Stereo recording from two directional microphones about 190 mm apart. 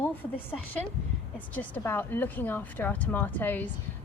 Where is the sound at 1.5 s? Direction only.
10° left (ahead or behind).